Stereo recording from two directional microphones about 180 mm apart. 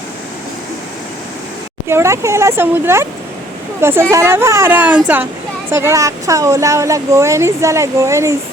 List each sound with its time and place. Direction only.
1.9 s speech: 15° right (ahead or behind)